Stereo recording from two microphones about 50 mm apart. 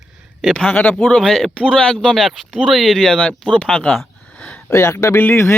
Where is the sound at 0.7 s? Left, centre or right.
Left.